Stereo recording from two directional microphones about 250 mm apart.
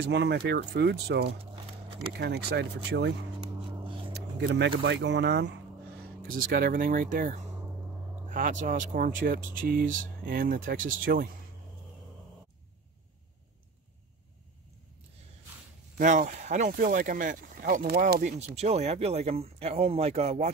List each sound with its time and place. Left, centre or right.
0.0 s speech: right
16.0 s speech: right